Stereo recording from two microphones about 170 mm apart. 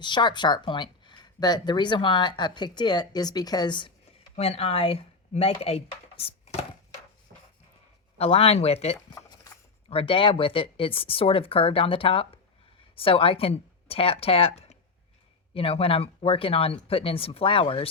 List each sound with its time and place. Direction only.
0.0 s speech: 25° left (ahead or behind)
8.2 s speech: 35° left (ahead or behind)
9.0 s a sound: 20° left (ahead or behind)
9.9 s speech: 30° left (ahead or behind)